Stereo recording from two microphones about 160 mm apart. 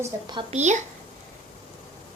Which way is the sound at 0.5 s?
45° right (ahead or behind).